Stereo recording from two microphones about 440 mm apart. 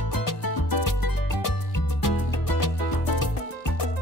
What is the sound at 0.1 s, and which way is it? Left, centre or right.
Music, left.